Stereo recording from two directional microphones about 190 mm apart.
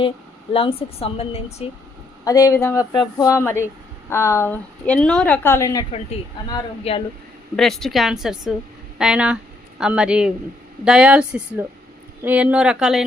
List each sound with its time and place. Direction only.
0.5 s a woman's voice: 30° left (ahead or behind)
2.2 s a woman's voice: 20° left (ahead or behind)
7.5 s a woman's voice: centre (ahead or behind)